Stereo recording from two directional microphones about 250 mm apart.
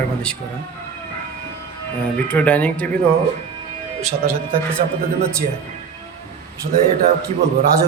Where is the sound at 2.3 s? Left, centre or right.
Centre.